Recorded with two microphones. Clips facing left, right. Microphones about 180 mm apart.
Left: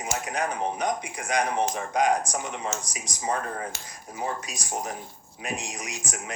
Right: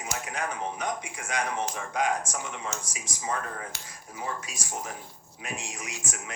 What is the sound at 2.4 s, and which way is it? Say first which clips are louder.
Speech: left 4 dB; 20° left (ahead or behind).